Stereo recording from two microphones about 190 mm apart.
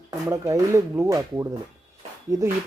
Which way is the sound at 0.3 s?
15° right (ahead or behind).